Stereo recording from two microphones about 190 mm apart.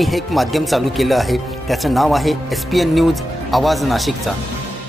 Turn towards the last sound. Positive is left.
turn(degrees=0)  # may be behind; listen again after turning